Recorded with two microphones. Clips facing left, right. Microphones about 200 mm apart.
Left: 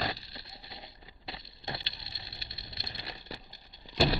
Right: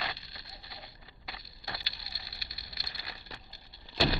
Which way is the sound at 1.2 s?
25° left (ahead or behind).